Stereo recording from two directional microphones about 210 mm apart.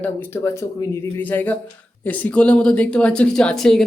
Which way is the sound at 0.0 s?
10° left (ahead or behind).